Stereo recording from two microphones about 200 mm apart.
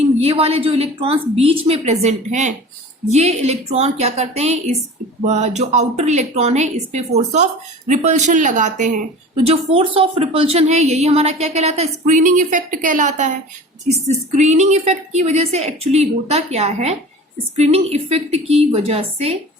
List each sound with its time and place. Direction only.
0.2 s a woman's voice: 30° right (ahead or behind)